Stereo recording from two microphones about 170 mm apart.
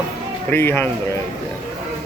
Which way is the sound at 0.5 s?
10° left (ahead or behind).